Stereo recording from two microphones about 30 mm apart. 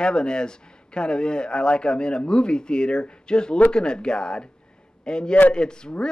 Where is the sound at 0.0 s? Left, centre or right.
Left.